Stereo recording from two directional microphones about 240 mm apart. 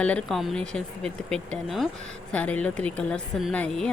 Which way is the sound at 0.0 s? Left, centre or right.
Centre.